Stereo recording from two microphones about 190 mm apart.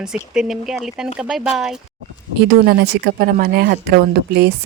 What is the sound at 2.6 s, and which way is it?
Speech, 55° right (ahead or behind).